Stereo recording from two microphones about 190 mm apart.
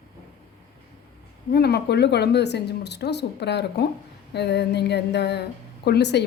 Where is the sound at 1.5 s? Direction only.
60° left (ahead or behind).